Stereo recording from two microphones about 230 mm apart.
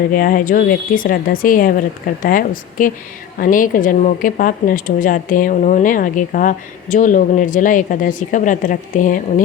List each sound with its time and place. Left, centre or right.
0.1 s a woman's voice: left